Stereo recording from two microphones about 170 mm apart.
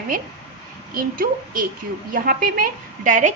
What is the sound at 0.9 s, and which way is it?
A woman's voice, 55° right (ahead or behind).